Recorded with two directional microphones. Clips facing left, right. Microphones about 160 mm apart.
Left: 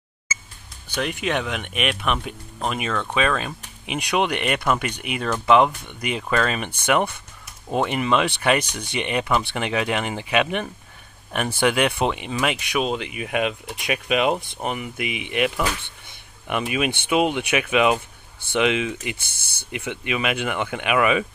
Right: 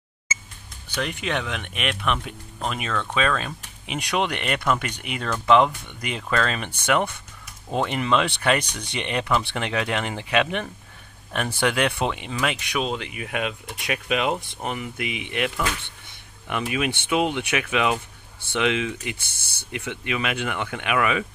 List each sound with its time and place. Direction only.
0.9 s speech: 10° left (ahead or behind)